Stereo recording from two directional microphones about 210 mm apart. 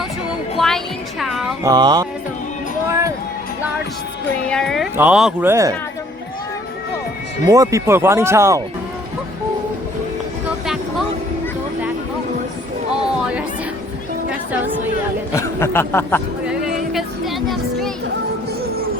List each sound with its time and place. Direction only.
0.5 s music: centre (ahead or behind)
1.6 s mantra: 20° right (ahead or behind)
4.4 s speech: 5° left (ahead or behind); by 5.7 s 15° right (ahead or behind)
7.4 s speech: 15° right (ahead or behind)
12.9 s a sound: 5° right (ahead or behind)
14.3 s music: 5° right (ahead or behind)
15.4 s speech: 10° left (ahead or behind)
16.5 s music: 5° right (ahead or behind)